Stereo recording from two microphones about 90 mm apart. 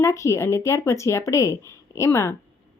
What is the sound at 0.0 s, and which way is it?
Speech, 35° left (ahead or behind).